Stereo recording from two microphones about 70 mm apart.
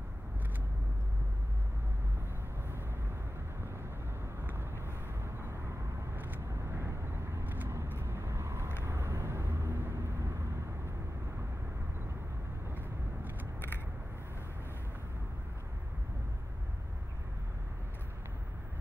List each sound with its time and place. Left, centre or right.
4.4 s vehicle: right
6.1 s vehicle: right
6.6 s vehicle: right
7.4 s vehicle: right
12.6 s vehicle: right